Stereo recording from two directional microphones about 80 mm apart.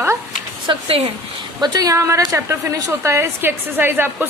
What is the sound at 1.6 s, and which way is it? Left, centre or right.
Speech, right.